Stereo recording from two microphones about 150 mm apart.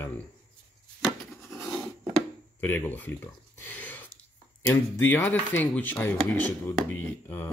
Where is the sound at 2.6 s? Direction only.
15° left (ahead or behind).